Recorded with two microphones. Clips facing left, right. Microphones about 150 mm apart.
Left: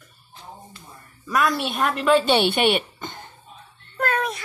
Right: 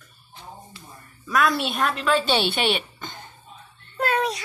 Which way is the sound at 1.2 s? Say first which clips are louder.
Even; centre (ahead or behind).